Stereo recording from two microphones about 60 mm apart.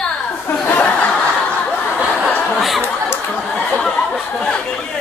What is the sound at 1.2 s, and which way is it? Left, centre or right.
Snicker, centre.